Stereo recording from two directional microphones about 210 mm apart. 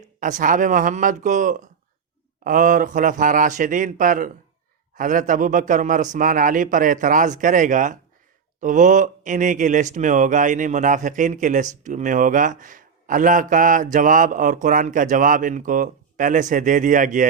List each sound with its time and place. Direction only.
0.2 s speech: 35° right (ahead or behind)